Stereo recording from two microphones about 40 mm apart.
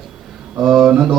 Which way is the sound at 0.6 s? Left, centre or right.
Centre.